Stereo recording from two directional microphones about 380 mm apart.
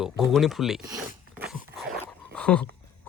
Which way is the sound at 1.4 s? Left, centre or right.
Centre.